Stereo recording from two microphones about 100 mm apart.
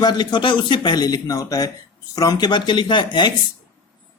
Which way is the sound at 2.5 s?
50° left (ahead or behind).